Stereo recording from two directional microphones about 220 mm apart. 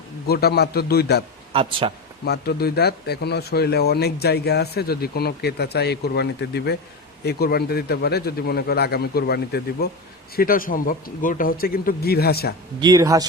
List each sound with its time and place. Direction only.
0.3 s speech: 45° left (ahead or behind)
1.5 s speech: 25° right (ahead or behind)
2.2 s speech: 50° left (ahead or behind)
12.8 s speech: 15° right (ahead or behind)